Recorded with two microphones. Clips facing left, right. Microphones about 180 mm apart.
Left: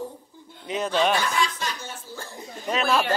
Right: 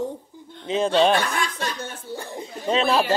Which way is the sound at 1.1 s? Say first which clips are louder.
Right 2 dB; 55° right (ahead or behind).